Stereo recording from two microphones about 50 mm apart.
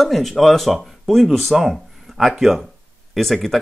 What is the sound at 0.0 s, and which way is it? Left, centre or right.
Speech, centre.